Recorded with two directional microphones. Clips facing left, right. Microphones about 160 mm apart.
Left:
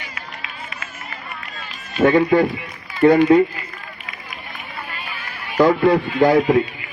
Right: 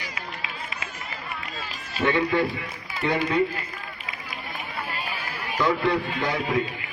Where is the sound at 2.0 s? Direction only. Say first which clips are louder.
Left 8 dB; 45° left (ahead or behind).